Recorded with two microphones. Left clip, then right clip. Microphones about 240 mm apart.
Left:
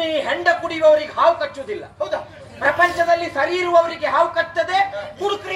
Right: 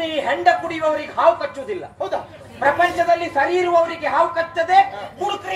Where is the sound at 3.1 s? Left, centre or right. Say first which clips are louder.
Right 1 dB; left.